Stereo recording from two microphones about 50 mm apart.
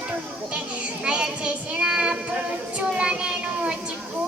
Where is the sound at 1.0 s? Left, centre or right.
Right.